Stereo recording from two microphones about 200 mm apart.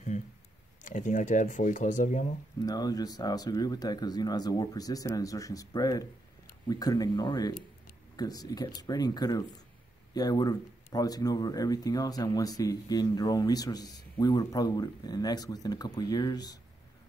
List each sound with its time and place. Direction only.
0.8 s speech: 40° left (ahead or behind)
2.6 s speech: 20° left (ahead or behind)